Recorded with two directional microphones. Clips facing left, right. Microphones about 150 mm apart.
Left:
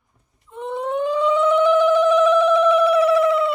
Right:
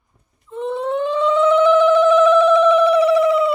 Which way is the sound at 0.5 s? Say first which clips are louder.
Right 3 dB; 15° left (ahead or behind).